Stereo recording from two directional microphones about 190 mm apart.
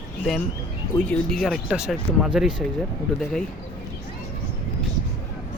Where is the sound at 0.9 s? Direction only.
5° left (ahead or behind).